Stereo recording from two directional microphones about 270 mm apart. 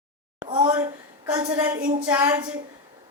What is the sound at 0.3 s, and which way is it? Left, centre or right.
A woman's voice, centre.